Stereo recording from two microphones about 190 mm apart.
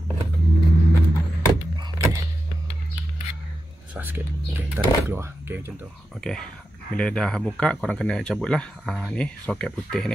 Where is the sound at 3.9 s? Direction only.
10° right (ahead or behind).